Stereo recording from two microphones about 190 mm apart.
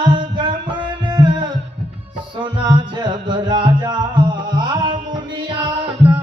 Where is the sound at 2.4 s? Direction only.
25° right (ahead or behind).